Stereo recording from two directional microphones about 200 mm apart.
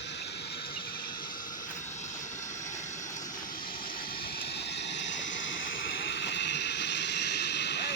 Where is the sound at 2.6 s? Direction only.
40° left (ahead or behind).